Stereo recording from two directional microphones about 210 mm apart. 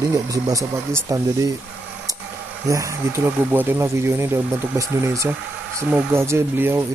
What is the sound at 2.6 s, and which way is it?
Speech, 15° right (ahead or behind).